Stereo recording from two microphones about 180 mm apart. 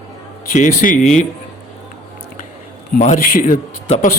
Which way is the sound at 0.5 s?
45° left (ahead or behind).